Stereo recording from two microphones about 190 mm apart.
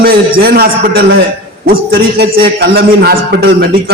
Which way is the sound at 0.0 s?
50° right (ahead or behind).